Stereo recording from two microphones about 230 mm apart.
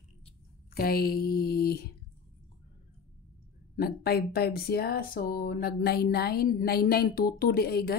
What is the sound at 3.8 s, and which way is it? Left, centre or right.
A woman's voice, left.